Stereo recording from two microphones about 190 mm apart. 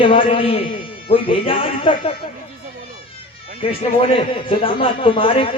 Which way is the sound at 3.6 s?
30° left (ahead or behind).